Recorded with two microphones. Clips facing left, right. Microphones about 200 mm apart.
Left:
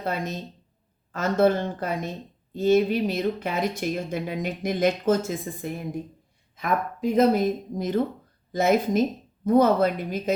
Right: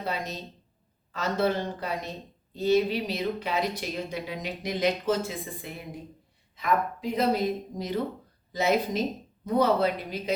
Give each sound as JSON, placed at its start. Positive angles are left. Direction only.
{"t": 0.0, "sound": "speech", "side_deg": 50}